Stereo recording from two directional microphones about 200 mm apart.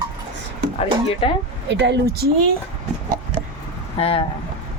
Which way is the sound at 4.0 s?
30° left (ahead or behind).